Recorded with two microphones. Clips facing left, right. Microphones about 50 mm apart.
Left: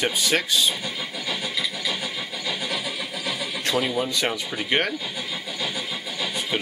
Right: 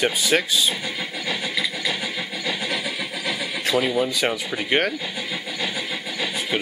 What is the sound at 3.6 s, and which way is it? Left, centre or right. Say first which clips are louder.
Neigh: right 3 dB; centre.